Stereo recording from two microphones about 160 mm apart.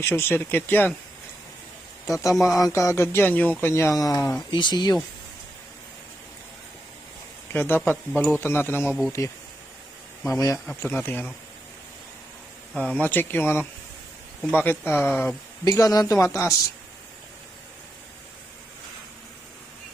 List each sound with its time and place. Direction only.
0.0 s speech: 15° left (ahead or behind)
2.0 s speech: 20° left (ahead or behind)
2.3 s speech: centre (ahead or behind)
2.6 s speech: 20° left (ahead or behind)
7.5 s speech: 15° left (ahead or behind)
10.7 s speech: 15° left (ahead or behind)
12.7 s speech: 10° left (ahead or behind)